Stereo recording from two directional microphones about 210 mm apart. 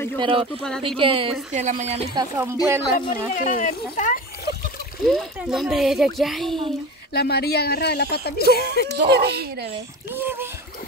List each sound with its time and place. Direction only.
0.2 s speech: 25° right (ahead or behind)
0.6 s speech: 5° left (ahead or behind)
0.8 s speech: 25° right (ahead or behind)
2.1 s speech: 15° right (ahead or behind)
3.1 s speech: 40° left (ahead or behind)
5.0 s speech: centre (ahead or behind)
7.2 s speech: 50° left (ahead or behind)
8.9 s speech: 50° right (ahead or behind)
10.1 s splash: 10° right (ahead or behind)